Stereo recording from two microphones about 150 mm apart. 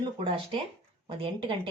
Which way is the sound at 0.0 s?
35° right (ahead or behind).